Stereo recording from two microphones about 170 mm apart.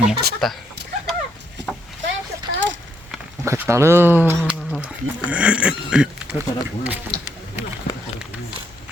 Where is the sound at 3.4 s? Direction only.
15° right (ahead or behind).